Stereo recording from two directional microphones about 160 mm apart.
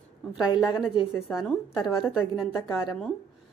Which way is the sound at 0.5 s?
25° left (ahead or behind).